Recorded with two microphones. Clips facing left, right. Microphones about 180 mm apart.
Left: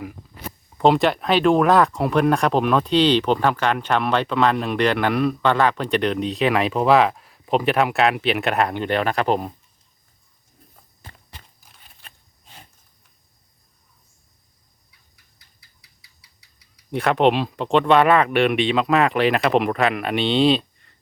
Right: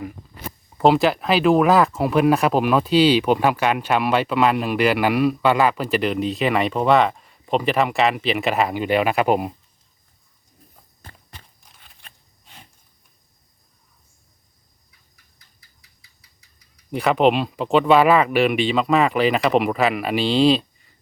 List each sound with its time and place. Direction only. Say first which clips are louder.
0.8 s speech: right 1 dB; centre (ahead or behind)
16.9 s speech: right 1 dB; centre (ahead or behind)